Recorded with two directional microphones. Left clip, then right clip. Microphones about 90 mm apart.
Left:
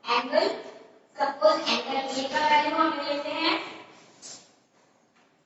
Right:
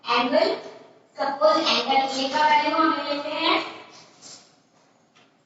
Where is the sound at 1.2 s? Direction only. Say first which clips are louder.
Right 3 dB; 35° right (ahead or behind).